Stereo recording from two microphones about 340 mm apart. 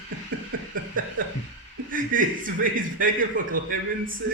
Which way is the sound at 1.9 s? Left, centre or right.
Right.